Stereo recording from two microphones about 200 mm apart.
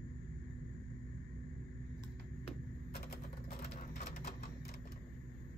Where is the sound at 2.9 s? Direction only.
50° left (ahead or behind).